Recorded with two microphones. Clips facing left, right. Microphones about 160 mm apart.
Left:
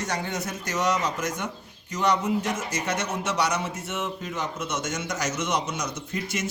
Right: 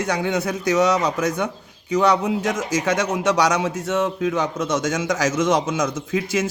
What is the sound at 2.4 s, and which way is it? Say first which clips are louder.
A man's voice: right 7 dB; 90° right.